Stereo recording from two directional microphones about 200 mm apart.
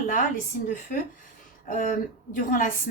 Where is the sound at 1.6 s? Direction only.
40° left (ahead or behind).